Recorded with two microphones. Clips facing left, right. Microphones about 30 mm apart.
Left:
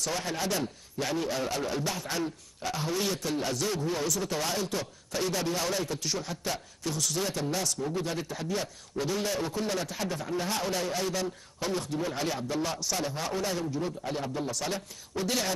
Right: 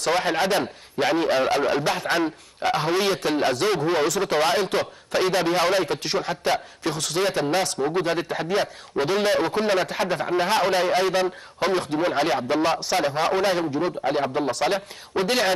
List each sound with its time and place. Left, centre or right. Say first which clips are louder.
0.0 s a man's voice: right 10 dB; right